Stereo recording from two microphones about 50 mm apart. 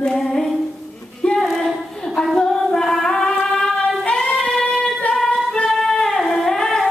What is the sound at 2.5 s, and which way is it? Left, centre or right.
Female singing, centre.